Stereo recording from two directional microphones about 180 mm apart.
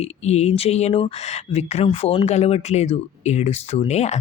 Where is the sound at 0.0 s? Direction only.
35° left (ahead or behind).